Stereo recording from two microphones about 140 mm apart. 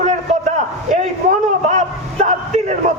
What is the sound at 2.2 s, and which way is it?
Speech, 55° right (ahead or behind).